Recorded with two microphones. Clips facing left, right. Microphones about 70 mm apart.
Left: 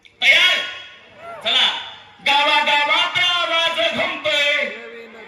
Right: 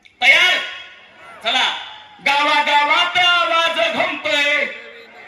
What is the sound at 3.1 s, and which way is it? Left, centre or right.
Music, right.